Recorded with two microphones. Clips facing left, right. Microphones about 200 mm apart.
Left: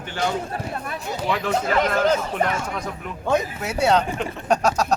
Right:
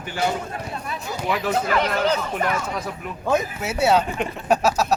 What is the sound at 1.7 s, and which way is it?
Speech, 40° left (ahead or behind).